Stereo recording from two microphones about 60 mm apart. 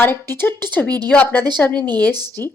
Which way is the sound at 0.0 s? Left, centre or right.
Left.